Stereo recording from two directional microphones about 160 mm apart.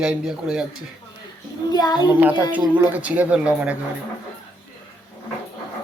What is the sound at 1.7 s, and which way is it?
Speech, 25° left (ahead or behind).